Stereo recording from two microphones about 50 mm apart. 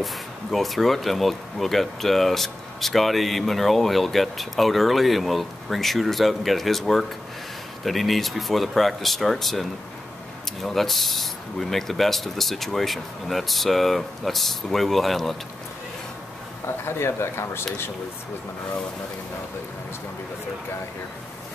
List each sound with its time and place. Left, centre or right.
0.0 s speech: centre
16.6 s speech: left